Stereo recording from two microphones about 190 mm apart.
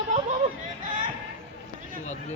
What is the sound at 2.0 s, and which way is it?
Chop, 40° left (ahead or behind).